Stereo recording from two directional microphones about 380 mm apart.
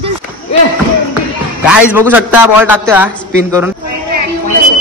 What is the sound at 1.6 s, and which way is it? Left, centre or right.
Speech, centre.